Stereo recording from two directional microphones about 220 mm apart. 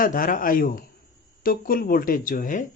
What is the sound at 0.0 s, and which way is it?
Speech, 40° left (ahead or behind).